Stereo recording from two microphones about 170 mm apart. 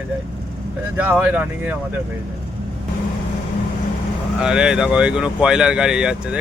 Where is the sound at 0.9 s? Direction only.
10° right (ahead or behind).